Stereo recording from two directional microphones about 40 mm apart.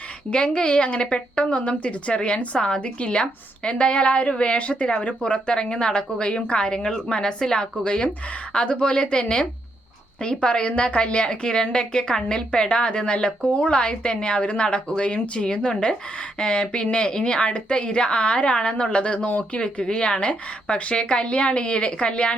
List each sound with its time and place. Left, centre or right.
0.3 s a woman's voice: left
2.6 s a woman's voice: centre
2.8 s a woman's voice: left